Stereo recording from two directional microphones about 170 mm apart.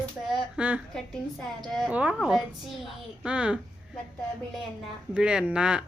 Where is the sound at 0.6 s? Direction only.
10° right (ahead or behind).